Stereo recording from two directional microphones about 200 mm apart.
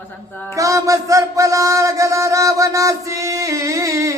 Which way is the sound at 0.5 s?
15° right (ahead or behind).